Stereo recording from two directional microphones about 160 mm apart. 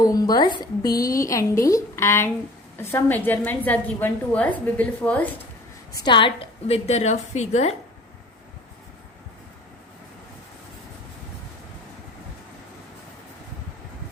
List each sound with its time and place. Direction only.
0.0 s a woman's voice: 20° left (ahead or behind)
5.9 s a woman's voice: 30° left (ahead or behind); by 7.7 s 45° left (ahead or behind)